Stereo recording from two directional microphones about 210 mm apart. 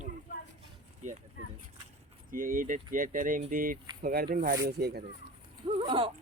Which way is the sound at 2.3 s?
40° right (ahead or behind).